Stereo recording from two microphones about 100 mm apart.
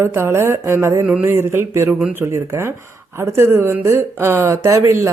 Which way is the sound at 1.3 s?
25° right (ahead or behind).